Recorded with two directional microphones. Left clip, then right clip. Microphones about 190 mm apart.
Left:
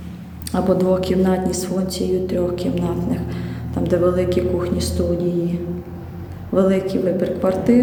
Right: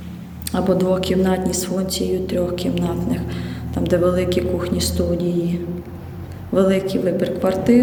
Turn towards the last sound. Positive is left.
turn(degrees=5)  # may be behind; listen again after turning